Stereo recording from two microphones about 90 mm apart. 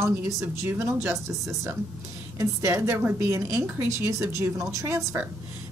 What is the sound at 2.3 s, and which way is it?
A woman's voice, 30° right (ahead or behind).